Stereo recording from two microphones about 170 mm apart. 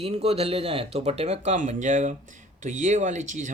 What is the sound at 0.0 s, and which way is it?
Speech, 35° right (ahead or behind).